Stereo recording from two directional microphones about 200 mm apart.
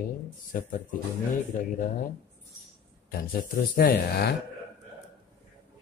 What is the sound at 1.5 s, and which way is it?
Dog, 40° left (ahead or behind).